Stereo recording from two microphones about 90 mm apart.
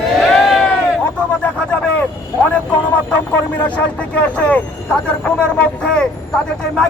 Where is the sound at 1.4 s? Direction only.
15° left (ahead or behind).